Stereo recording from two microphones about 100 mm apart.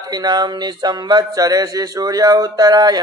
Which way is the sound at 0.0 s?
40° right (ahead or behind).